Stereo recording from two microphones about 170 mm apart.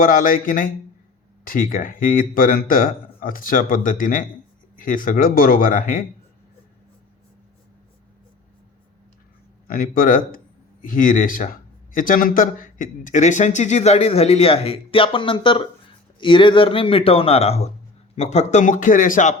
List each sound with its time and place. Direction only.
0.0 s speech: 55° left (ahead or behind)
9.6 s speech: 60° left (ahead or behind)